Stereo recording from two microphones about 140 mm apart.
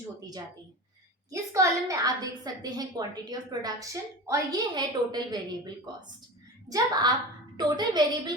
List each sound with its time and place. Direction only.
1.3 s a woman's voice: 25° right (ahead or behind)